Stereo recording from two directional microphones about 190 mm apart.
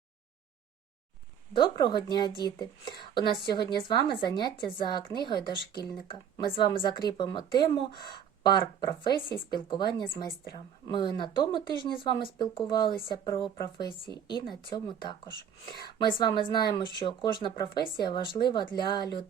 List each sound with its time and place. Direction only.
1.5 s speech: 25° left (ahead or behind)